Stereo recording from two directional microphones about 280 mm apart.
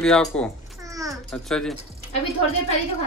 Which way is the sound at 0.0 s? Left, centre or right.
Centre.